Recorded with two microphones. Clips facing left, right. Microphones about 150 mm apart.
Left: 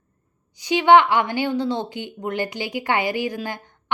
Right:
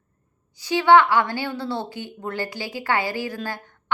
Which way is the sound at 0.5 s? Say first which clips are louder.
Left 1 dB; 20° left (ahead or behind).